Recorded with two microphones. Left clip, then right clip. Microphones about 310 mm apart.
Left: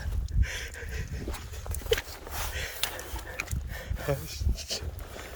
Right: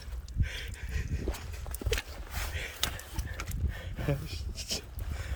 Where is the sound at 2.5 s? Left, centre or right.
Centre.